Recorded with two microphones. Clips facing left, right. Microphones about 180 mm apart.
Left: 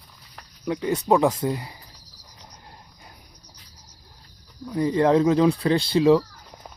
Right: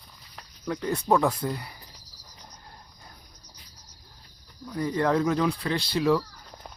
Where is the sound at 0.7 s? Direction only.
15° left (ahead or behind).